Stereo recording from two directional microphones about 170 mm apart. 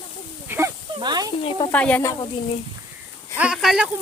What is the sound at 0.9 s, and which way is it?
Speech, 25° right (ahead or behind).